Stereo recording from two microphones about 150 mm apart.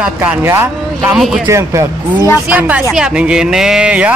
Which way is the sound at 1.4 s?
20° right (ahead or behind).